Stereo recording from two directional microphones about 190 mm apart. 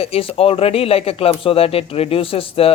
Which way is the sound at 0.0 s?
30° left (ahead or behind).